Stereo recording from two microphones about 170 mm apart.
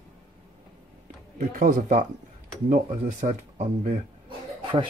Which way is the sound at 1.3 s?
55° right (ahead or behind).